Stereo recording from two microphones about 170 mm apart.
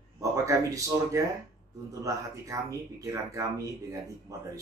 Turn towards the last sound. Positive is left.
turn(degrees=-20)  # may be behind; listen again after turning